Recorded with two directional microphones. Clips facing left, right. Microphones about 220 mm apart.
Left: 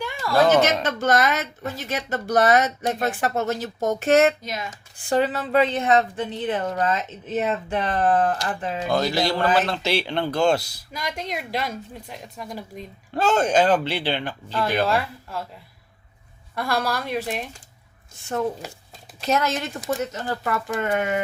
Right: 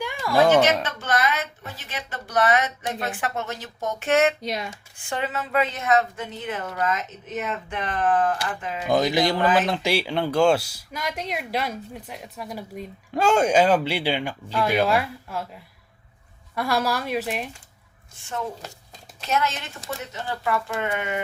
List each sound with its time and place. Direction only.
0.0 s a sound: 15° right (ahead or behind)
0.6 s a woman's voice: 40° left (ahead or behind)
4.4 s speech: 30° right (ahead or behind)
5.0 s a woman's voice: 35° left (ahead or behind)
8.9 s speech: 20° right (ahead or behind)
19.2 s a woman's voice: 40° left (ahead or behind)